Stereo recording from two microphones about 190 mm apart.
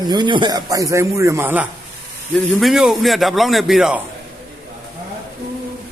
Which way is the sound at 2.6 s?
Centre (ahead or behind).